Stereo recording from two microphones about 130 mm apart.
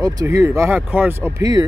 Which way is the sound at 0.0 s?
25° right (ahead or behind).